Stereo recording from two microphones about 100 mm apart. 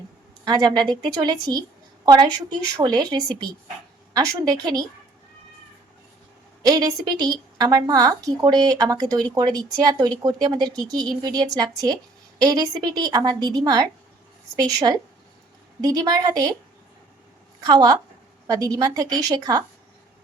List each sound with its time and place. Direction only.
0.4 s a woman's voice: 45° right (ahead or behind)
6.6 s a woman's voice: 40° right (ahead or behind)
17.6 s a woman's voice: 40° right (ahead or behind)